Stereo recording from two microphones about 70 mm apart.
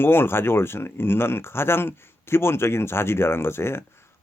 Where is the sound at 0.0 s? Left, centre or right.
Left.